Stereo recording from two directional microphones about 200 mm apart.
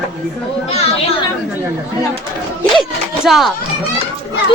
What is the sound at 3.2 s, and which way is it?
Speech, centre (ahead or behind).